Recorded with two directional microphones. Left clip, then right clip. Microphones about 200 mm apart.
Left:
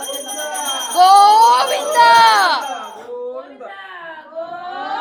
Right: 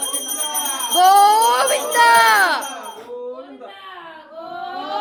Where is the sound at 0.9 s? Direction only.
35° right (ahead or behind).